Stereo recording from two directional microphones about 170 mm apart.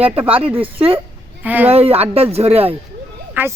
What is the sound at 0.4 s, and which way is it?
Speech, 30° right (ahead or behind).